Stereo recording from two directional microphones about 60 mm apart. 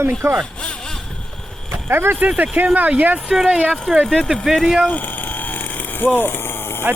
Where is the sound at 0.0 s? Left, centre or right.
Right.